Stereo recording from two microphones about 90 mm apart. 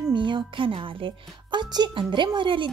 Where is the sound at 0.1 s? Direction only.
60° right (ahead or behind).